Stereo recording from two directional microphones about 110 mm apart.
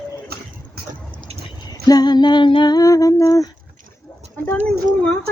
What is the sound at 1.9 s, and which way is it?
Speech, 35° left (ahead or behind).